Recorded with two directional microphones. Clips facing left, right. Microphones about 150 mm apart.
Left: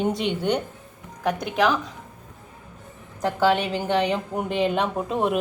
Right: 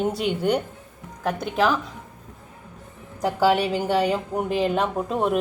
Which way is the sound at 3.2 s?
10° right (ahead or behind).